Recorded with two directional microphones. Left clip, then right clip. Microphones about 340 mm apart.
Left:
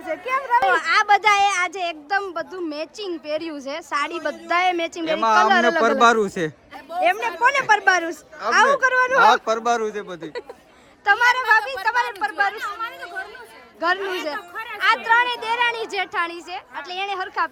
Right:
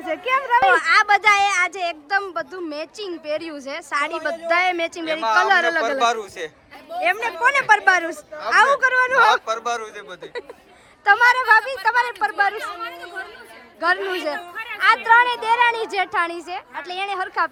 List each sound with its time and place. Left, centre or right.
0.0 s speech: centre
7.0 s speech: centre
9.2 s speech: left
11.0 s a woman's voice: centre